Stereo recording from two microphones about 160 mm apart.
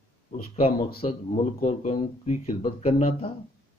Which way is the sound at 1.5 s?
45° left (ahead or behind).